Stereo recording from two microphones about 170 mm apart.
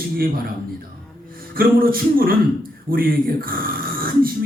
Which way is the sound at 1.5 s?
60° right (ahead or behind).